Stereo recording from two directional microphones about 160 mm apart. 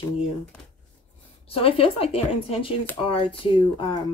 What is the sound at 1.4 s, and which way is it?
Speech, 35° left (ahead or behind).